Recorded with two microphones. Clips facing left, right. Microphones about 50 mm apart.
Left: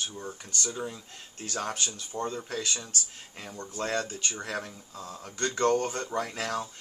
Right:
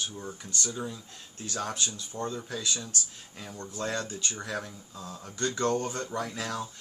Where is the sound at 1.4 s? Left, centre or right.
Left.